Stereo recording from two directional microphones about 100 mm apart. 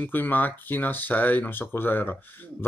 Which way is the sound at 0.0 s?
20° left (ahead or behind).